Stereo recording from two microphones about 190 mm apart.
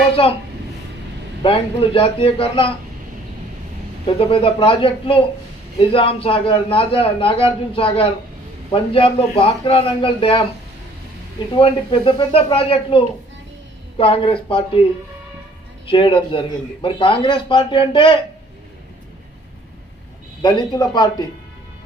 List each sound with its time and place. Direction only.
0.2 s a man's voice: 25° left (ahead or behind)
1.4 s a man's voice: 25° left (ahead or behind)
4.0 s a man's voice: 30° left (ahead or behind)
14.0 s a man's voice: 30° left (ahead or behind)
15.9 s a man's voice: 25° left (ahead or behind)
20.4 s a man's voice: 25° left (ahead or behind)